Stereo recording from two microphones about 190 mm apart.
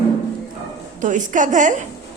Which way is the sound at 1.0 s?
40° right (ahead or behind).